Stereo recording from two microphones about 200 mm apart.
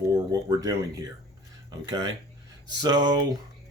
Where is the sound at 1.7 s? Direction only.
20° right (ahead or behind).